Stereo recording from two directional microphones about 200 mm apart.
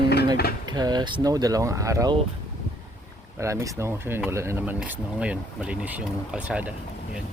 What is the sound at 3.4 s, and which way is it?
Speech, 15° right (ahead or behind).